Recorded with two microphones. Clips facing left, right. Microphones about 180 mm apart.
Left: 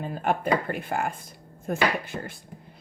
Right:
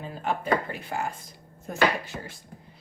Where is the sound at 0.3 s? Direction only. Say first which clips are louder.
Left 2 dB; 55° left (ahead or behind).